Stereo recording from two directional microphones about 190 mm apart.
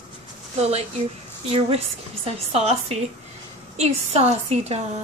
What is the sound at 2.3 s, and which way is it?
A woman's voice, 35° right (ahead or behind).